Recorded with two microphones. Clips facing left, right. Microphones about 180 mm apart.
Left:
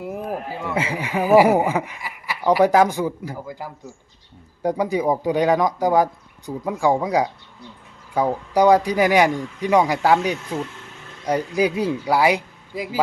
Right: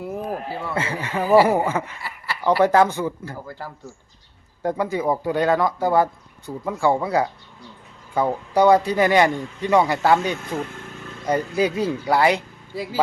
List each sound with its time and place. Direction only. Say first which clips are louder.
0.0 s speech: even; 10° left (ahead or behind)